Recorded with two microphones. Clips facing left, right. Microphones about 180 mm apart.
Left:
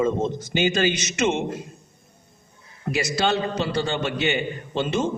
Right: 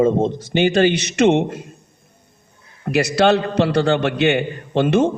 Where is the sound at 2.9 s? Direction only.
65° right (ahead or behind).